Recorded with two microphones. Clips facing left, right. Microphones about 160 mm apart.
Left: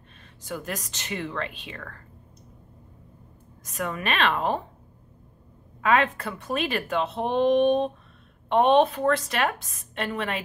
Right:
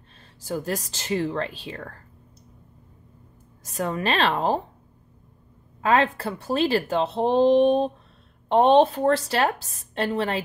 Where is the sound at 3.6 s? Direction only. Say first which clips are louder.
Right 4 dB; 35° right (ahead or behind).